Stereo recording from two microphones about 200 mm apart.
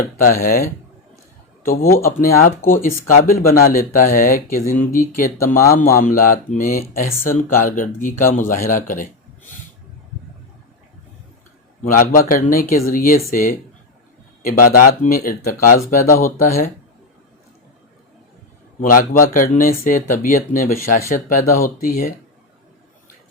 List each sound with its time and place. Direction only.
0.2 s speech: 45° left (ahead or behind)
1.6 s speech: 45° left (ahead or behind)
11.8 s speech: 45° left (ahead or behind)
18.8 s speech: 45° left (ahead or behind)